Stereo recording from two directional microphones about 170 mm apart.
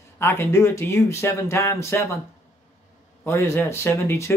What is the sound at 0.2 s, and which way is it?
Speech, 15° left (ahead or behind).